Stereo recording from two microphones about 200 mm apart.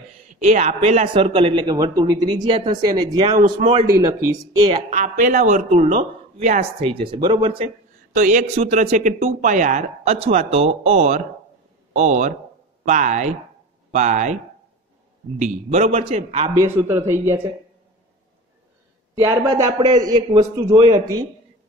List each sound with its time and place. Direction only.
0.5 s a man's voice: 35° right (ahead or behind); by 3.3 s 20° right (ahead or behind)
3.6 s speech: 30° right (ahead or behind)
4.8 s speech: 40° right (ahead or behind)
7.1 s a man's voice: 20° right (ahead or behind)
8.1 s speech: 40° right (ahead or behind)
16.5 s speech: 10° right (ahead or behind)
19.1 s a man's voice: 15° right (ahead or behind)